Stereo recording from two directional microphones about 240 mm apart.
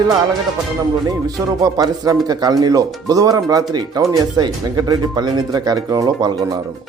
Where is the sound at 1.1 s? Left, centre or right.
Centre.